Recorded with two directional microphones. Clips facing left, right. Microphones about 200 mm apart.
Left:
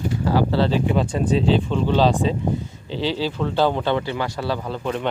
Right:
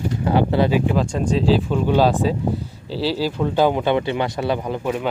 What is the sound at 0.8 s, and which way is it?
Speech, centre (ahead or behind).